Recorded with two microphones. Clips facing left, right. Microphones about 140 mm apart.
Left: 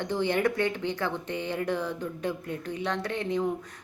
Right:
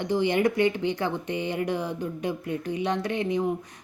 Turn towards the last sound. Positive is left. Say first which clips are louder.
# right 3 dB
turn(degrees=-15)  # may be behind; listen again after turning